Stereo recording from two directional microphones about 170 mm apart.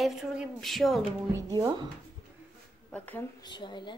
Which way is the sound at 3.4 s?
25° left (ahead or behind).